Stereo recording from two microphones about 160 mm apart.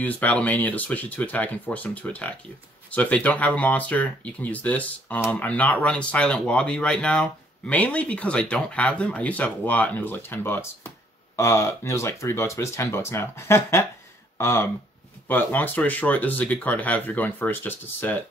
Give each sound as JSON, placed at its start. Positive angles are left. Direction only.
{"t": 0.0, "sound": "speech", "side_deg": 10}